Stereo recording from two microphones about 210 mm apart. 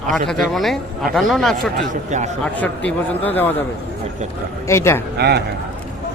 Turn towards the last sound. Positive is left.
turn(degrees=-50)  # may be behind; listen again after turning